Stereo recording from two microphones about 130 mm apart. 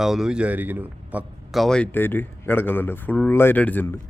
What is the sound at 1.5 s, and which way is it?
Speech, centre (ahead or behind).